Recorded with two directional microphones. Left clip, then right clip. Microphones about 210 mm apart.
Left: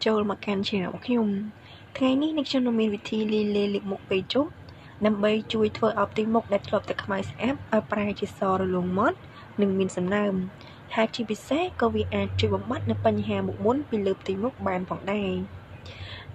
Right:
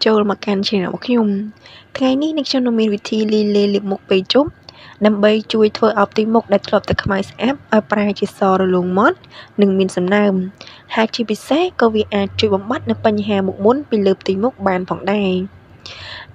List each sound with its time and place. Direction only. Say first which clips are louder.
0.0 s a woman's voice: right 10 dB; 35° right (ahead or behind)